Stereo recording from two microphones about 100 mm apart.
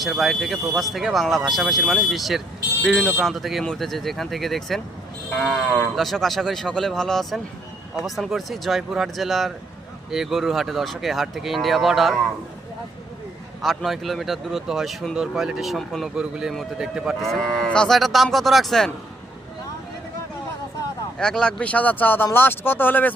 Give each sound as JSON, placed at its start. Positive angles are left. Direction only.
{"t": 0.0, "sound": "speech", "side_deg": 0}
{"t": 13.6, "sound": "a man's voice", "side_deg": 0}
{"t": 17.5, "sound": "speech", "side_deg": 10}
{"t": 21.2, "sound": "speech", "side_deg": 10}